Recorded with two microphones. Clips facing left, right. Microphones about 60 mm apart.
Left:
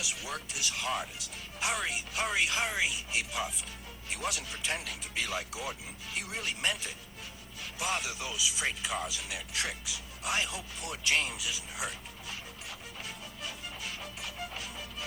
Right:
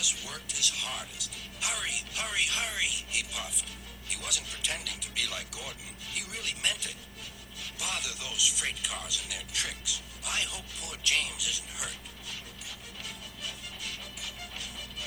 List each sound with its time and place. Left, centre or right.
0.0 s speech: left
13.1 s music: left